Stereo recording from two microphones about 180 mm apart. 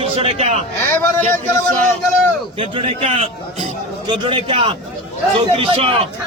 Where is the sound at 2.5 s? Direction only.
30° right (ahead or behind).